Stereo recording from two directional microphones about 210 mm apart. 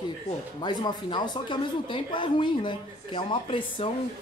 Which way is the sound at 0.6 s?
20° left (ahead or behind).